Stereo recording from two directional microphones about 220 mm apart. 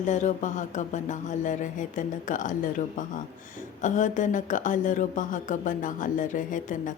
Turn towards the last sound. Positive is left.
turn(degrees=35)  # may be behind; listen again after turning